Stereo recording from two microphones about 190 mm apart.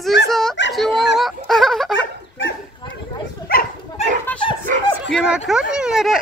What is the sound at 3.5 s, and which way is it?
Dog, 50° left (ahead or behind).